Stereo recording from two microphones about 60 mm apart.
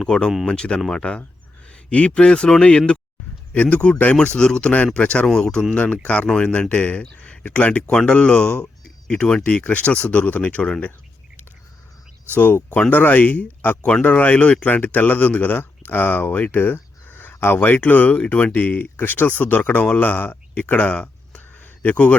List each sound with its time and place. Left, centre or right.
0.0 s a man's voice: centre
12.9 s speech: left